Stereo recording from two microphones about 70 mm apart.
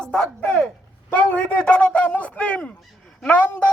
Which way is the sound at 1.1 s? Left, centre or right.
Left.